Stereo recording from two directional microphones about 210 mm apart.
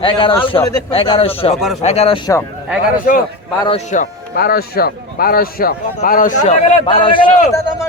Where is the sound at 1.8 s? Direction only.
30° left (ahead or behind).